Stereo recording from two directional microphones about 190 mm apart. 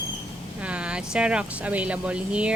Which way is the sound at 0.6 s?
5° right (ahead or behind).